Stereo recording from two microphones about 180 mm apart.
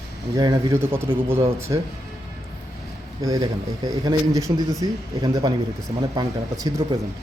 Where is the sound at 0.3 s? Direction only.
20° right (ahead or behind).